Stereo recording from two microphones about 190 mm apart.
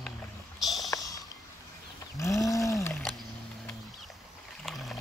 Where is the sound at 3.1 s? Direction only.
Centre (ahead or behind).